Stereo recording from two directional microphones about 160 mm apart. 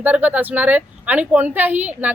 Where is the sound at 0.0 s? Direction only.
10° right (ahead or behind).